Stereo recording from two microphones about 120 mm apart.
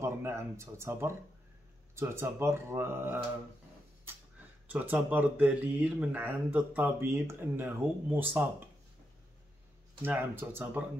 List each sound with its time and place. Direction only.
0.0 s speech: 20° right (ahead or behind)
4.6 s speech: 10° right (ahead or behind)
10.0 s speech: 15° right (ahead or behind)